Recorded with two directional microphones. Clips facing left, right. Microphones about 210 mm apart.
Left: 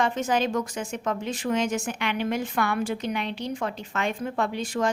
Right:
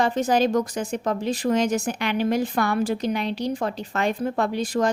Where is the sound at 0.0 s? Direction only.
35° right (ahead or behind).